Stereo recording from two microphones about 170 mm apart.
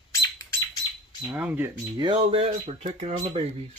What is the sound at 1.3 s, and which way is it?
Speech, 10° right (ahead or behind).